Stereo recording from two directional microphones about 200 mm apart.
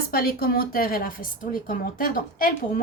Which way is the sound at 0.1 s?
50° left (ahead or behind).